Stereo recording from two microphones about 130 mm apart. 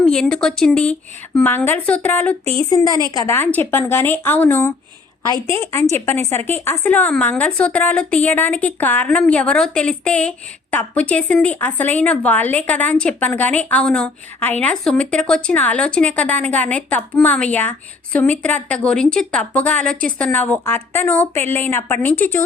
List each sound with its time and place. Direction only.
0.0 s a woman's voice: 5° left (ahead or behind)
2.6 s speech: 30° left (ahead or behind)
3.2 s a woman's voice: 20° left (ahead or behind)